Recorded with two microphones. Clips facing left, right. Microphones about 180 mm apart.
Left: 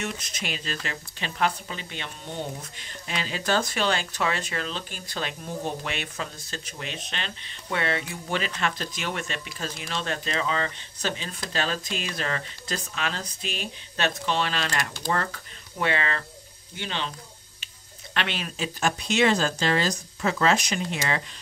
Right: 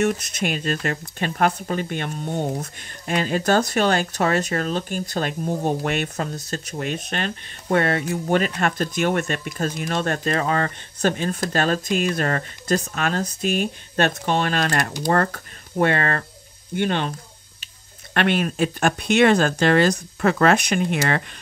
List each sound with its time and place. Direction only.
0.0 s speech: 50° right (ahead or behind)
18.1 s speech: 50° right (ahead or behind)